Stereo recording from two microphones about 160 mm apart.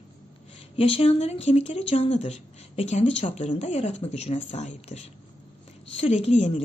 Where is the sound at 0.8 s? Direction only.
35° left (ahead or behind).